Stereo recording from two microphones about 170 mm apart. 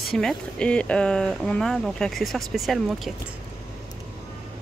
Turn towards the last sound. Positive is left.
turn(degrees=0)  # may be behind; listen again after turning